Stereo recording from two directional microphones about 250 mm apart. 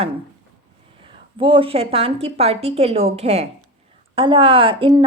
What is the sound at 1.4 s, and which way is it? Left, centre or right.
A woman's voice, right.